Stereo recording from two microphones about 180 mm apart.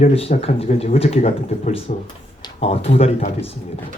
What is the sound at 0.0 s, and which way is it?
Speech, 35° left (ahead or behind).